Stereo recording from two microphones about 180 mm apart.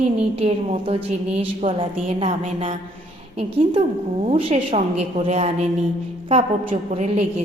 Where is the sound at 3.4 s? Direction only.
30° right (ahead or behind).